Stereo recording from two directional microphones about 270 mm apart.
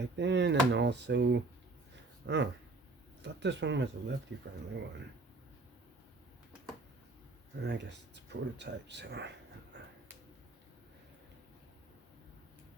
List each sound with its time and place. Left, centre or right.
0.0 s speech: right
7.6 s speech: right